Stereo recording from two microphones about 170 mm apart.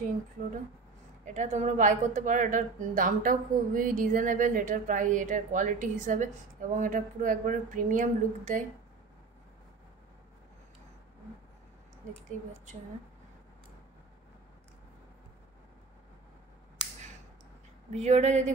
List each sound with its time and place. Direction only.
1.2 s a woman's voice: 45° right (ahead or behind)
17.9 s a woman's voice: 40° right (ahead or behind)